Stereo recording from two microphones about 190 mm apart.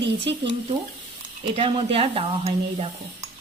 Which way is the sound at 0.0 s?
65° right (ahead or behind).